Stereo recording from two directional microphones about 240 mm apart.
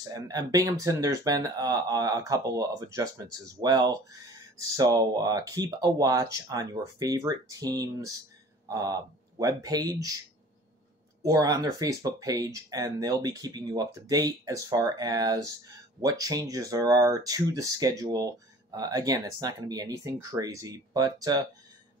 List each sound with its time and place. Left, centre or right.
0.1 s speech: centre
11.2 s speech: centre